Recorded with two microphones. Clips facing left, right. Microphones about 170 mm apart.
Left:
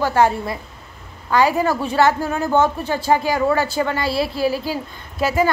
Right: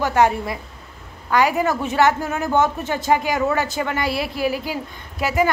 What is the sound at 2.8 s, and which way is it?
Speech, 35° left (ahead or behind).